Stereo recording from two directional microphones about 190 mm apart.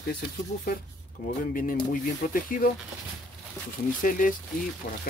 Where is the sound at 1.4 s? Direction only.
45° left (ahead or behind).